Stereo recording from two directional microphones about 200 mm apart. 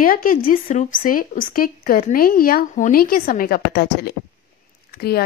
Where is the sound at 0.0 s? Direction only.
45° left (ahead or behind).